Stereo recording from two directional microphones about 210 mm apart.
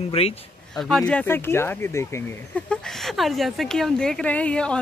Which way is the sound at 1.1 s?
10° left (ahead or behind).